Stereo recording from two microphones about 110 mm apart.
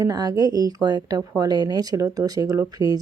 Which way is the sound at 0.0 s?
35° right (ahead or behind).